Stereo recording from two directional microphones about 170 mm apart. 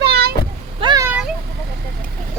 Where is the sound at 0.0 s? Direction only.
70° right (ahead or behind).